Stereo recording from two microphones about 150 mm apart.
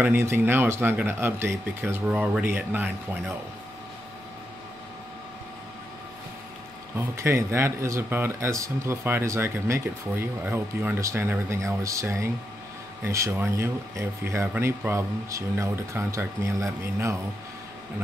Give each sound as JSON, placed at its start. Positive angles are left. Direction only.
{"t": 0.0, "sound": "speech", "side_deg": -15}
{"t": 7.0, "sound": "speech", "side_deg": -20}